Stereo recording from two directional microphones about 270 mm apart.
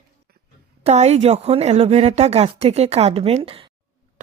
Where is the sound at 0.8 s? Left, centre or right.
Right.